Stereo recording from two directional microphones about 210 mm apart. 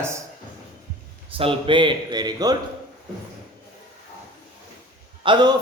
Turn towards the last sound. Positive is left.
turn(degrees=-20)  # may be behind; listen again after turning